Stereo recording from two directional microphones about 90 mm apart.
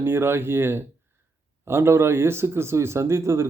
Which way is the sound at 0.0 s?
25° right (ahead or behind).